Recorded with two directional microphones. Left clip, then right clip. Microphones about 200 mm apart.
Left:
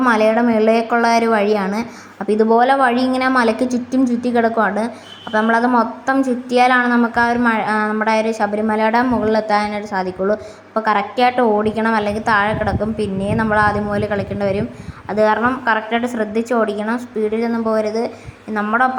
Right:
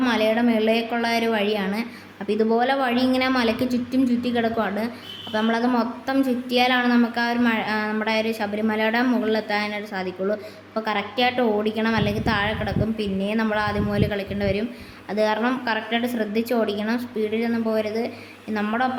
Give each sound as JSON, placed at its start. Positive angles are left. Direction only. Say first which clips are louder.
{"t": 0.1, "sound": "a woman's voice", "louder": "left 7 dB", "side_deg": 15}
{"t": 17.7, "sound": "a woman's voice", "louder": "left 7 dB", "side_deg": 10}